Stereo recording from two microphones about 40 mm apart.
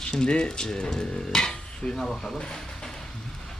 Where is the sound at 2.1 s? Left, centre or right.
Centre.